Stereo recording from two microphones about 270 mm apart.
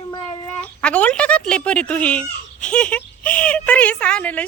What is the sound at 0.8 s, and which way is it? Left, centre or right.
Speech, centre.